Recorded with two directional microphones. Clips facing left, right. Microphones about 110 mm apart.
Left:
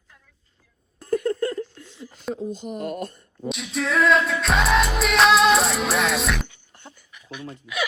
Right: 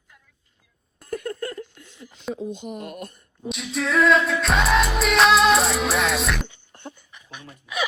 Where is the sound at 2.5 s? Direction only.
40° left (ahead or behind).